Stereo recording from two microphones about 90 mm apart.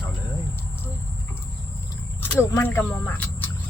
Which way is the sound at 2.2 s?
30° left (ahead or behind).